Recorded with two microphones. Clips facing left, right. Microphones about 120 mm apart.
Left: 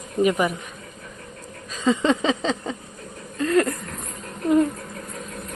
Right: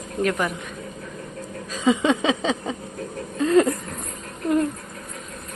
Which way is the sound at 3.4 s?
15° right (ahead or behind).